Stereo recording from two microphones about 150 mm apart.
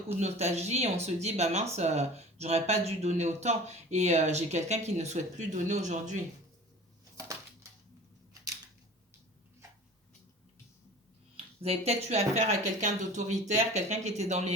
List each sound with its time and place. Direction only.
0.2 s speech: 45° right (ahead or behind)
7.2 s a sound: 20° right (ahead or behind)
11.9 s speech: 45° right (ahead or behind)